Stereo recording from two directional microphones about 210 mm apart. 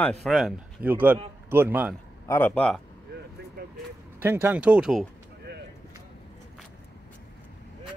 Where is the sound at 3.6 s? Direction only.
45° right (ahead or behind).